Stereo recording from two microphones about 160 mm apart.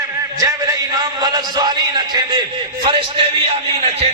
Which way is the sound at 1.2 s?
25° right (ahead or behind).